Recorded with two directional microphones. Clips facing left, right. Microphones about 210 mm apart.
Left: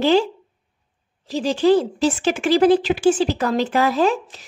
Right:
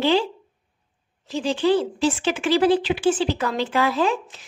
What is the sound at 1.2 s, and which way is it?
A woman's voice, 40° left (ahead or behind).